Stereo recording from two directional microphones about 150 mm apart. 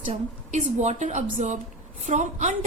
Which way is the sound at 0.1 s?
50° right (ahead or behind).